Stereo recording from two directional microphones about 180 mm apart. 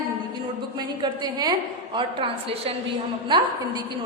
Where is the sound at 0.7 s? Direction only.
25° right (ahead or behind).